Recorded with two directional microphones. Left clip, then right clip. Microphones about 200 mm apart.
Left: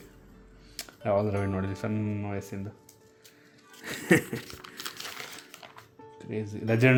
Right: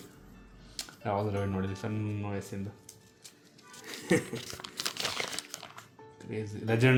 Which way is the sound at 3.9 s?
45° left (ahead or behind).